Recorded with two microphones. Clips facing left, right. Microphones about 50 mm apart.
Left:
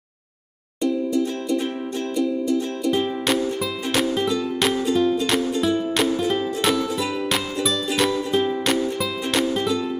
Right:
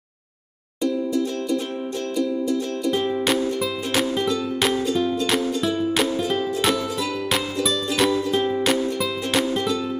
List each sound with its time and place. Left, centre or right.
0.8 s music: centre